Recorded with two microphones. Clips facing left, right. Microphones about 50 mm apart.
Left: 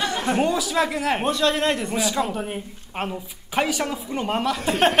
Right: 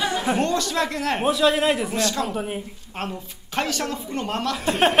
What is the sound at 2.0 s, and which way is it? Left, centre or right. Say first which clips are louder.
Speech: even; centre.